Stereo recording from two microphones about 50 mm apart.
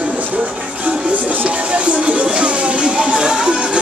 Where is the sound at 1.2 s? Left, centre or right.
Right.